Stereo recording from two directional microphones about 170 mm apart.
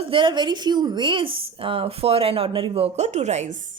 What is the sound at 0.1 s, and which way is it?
A woman's voice, 30° right (ahead or behind).